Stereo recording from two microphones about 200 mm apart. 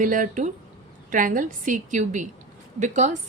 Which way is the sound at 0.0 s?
40° right (ahead or behind).